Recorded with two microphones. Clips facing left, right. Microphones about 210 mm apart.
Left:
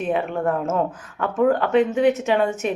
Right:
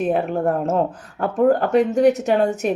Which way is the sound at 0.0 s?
40° right (ahead or behind).